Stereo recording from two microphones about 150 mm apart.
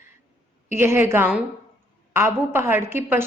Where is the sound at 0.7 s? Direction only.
15° right (ahead or behind).